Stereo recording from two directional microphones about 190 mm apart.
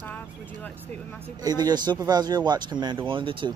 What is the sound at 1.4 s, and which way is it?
Speech, 20° right (ahead or behind).